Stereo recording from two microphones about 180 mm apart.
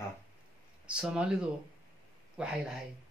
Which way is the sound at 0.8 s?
5° right (ahead or behind).